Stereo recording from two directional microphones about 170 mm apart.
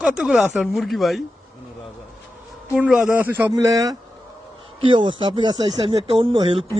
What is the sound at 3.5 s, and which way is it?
Speech, 20° right (ahead or behind).